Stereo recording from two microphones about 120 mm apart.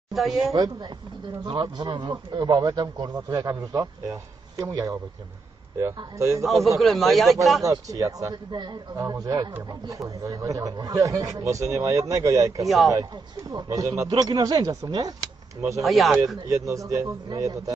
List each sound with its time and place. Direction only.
0.1 s a woman's voice: centre (ahead or behind)
1.5 s a man's voice: 35° right (ahead or behind)
6.4 s speech: centre (ahead or behind)
7.6 s a man's voice: 30° right (ahead or behind)
12.6 s speech: centre (ahead or behind)
13.5 s a man's voice: 30° right (ahead or behind)
15.8 s speech: centre (ahead or behind)
16.4 s a man's voice: 25° right (ahead or behind)